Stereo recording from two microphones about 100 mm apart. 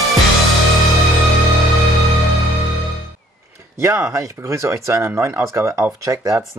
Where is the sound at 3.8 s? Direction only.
30° right (ahead or behind).